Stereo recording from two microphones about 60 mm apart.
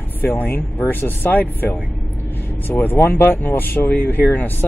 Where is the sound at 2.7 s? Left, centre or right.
Left.